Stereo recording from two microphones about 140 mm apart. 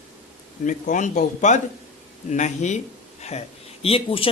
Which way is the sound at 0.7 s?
65° left (ahead or behind).